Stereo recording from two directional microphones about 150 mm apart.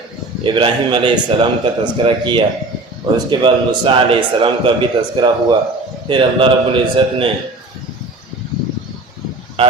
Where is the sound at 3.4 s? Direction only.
35° right (ahead or behind).